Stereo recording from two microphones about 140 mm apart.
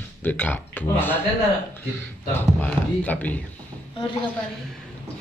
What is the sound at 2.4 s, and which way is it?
Speech, 10° left (ahead or behind).